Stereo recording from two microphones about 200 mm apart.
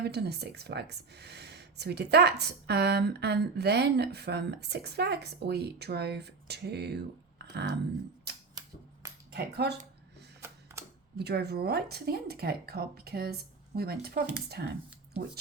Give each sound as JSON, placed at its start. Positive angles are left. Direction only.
{"t": 0.0, "sound": "speech", "side_deg": -55}
{"t": 8.3, "sound": "camera", "side_deg": -55}
{"t": 9.3, "sound": "speech", "side_deg": -55}
{"t": 10.4, "sound": "mechanisms", "side_deg": -10}
{"t": 11.2, "sound": "speech", "side_deg": -55}